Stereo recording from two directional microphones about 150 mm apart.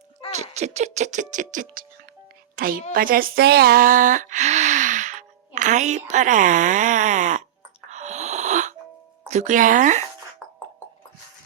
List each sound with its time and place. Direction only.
0.3 s speech: 50° right (ahead or behind)
2.6 s a woman's voice: 70° right (ahead or behind); by 7.4 s 55° right (ahead or behind)
7.9 s wheeze: 50° right (ahead or behind)
9.3 s speech: 55° right (ahead or behind)